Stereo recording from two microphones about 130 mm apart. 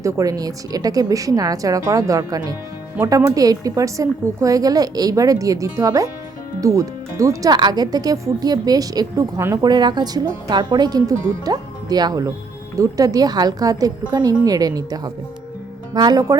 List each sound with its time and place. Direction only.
0.0 s a woman's voice: 25° right (ahead or behind)
9.6 s a woman's voice: 35° right (ahead or behind)